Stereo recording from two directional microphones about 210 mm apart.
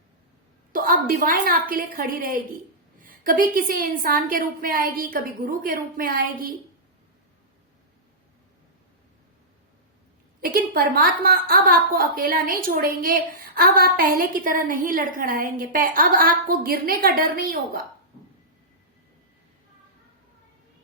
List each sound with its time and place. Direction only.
0.7 s a woman's voice: 45° right (ahead or behind)
10.4 s a woman's voice: 45° right (ahead or behind)